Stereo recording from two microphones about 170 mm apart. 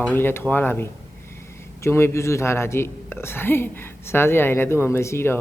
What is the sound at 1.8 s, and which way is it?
Speech, 15° left (ahead or behind).